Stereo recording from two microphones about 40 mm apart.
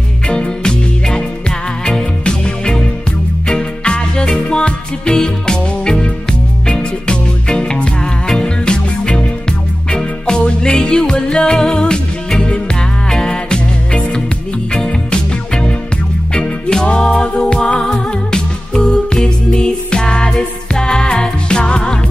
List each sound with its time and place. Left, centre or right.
0.3 s music: left
16.7 s music: centre